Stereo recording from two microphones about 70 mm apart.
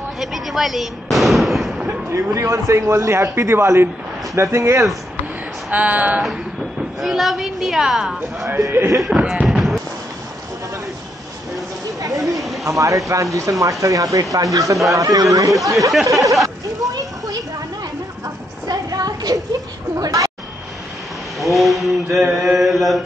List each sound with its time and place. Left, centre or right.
0.2 s firecracker: centre
2.1 s speech: right
5.7 s speech: right
7.0 s mantra: centre
8.5 s speech: right
9.3 s fireworks: centre
12.6 s speech: right
16.4 s a sound: right
18.7 s a sound: right
20.0 s speech: right
21.4 s mantra: centre